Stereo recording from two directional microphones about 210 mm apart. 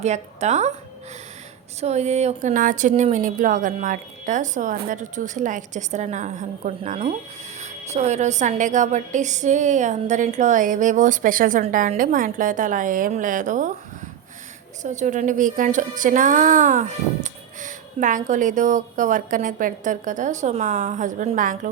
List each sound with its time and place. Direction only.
0.0 s a woman's voice: 30° right (ahead or behind)
1.8 s a woman's voice: 30° right (ahead or behind)
14.8 s a woman's voice: 35° right (ahead or behind)